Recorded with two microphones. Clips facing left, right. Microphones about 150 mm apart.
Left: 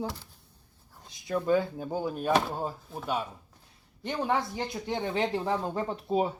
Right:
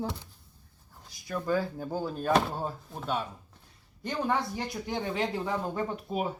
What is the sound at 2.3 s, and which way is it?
Speech, 5° left (ahead or behind).